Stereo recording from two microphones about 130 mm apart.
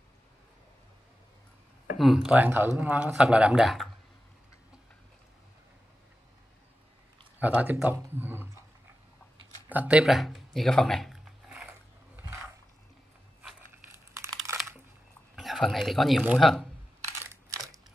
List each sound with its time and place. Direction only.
2.0 s speech: centre (ahead or behind)
7.3 s speech: 10° right (ahead or behind)
9.7 s a sound: 10° right (ahead or behind)
13.4 s crushing: 10° right (ahead or behind)
14.1 s crumpling: 20° right (ahead or behind)
15.3 s speech: centre (ahead or behind)
17.3 s a sound: 25° right (ahead or behind)